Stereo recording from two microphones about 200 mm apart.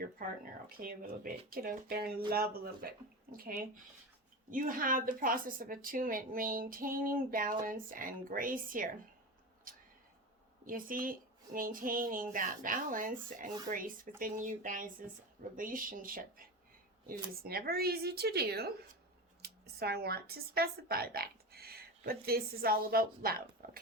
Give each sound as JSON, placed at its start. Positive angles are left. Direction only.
{"t": 0.2, "sound": "speech", "side_deg": -45}
{"t": 9.7, "sound": "cat", "side_deg": -45}
{"t": 10.7, "sound": "speech", "side_deg": -45}
{"t": 17.4, "sound": "speech", "side_deg": -50}